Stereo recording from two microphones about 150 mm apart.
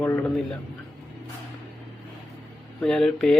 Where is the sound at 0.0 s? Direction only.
15° left (ahead or behind).